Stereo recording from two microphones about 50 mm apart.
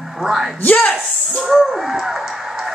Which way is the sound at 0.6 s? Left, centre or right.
Left.